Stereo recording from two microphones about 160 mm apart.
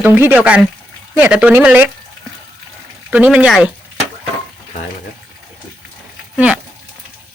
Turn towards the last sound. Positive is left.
turn(degrees=-10)  # may be behind; listen again after turning